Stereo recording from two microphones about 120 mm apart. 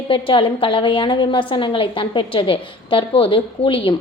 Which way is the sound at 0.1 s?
45° left (ahead or behind).